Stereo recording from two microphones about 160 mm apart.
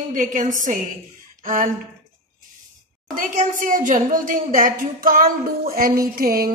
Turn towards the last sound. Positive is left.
turn(degrees=-65)  # may be behind; listen again after turning